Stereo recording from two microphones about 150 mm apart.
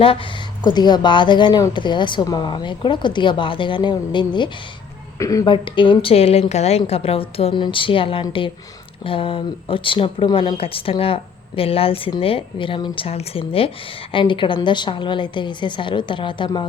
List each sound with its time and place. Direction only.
0.6 s a woman's voice: 30° left (ahead or behind)
5.6 s speech: 35° left (ahead or behind)